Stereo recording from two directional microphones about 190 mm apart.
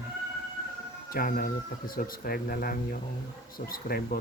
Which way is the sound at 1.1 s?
50° left (ahead or behind).